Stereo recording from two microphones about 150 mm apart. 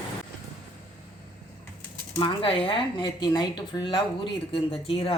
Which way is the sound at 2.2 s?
35° left (ahead or behind).